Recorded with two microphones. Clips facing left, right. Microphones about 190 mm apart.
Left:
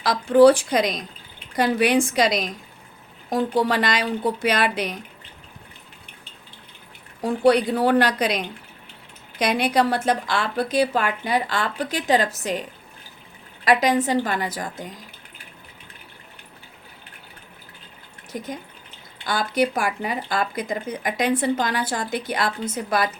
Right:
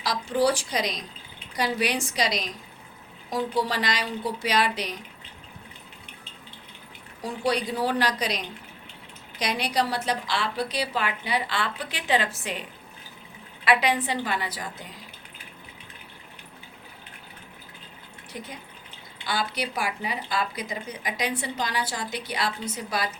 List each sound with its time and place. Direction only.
0.0 s a woman's voice: 55° left (ahead or behind)
7.2 s a woman's voice: 55° left (ahead or behind)
13.7 s speech: 40° left (ahead or behind)
18.3 s speech: 45° left (ahead or behind)